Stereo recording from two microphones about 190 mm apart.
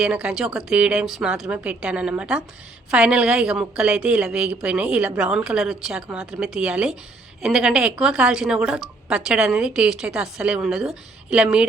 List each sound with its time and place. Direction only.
0.0 s speech: 5° right (ahead or behind)